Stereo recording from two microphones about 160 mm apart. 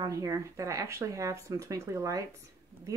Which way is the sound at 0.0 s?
20° right (ahead or behind).